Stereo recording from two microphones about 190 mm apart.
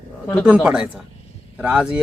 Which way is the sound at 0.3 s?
5° right (ahead or behind).